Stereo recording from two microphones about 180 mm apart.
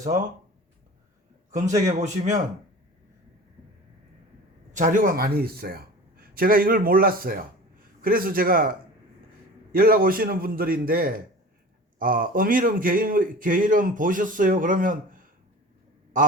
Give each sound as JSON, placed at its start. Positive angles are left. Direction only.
{"t": 1.5, "sound": "a man's voice", "side_deg": -40}
{"t": 4.7, "sound": "a man's voice", "side_deg": -45}
{"t": 9.7, "sound": "a man's voice", "side_deg": -55}